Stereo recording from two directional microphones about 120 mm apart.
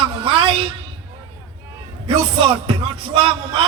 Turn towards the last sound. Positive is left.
turn(degrees=-45)  # may be behind; listen again after turning